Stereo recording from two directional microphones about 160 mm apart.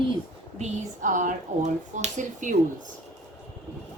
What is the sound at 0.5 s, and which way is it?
Speech, 45° right (ahead or behind).